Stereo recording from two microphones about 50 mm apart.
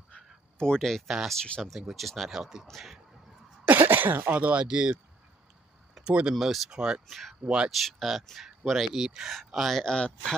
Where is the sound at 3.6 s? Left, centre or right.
Right.